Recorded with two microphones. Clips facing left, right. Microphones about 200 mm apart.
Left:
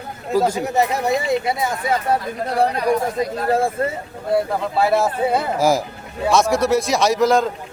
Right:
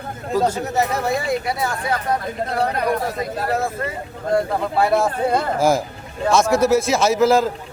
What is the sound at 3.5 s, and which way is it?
Speech, 30° left (ahead or behind).